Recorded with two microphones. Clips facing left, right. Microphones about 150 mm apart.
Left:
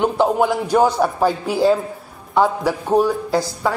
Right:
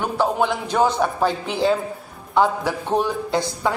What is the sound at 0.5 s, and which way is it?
A man's voice, 10° left (ahead or behind).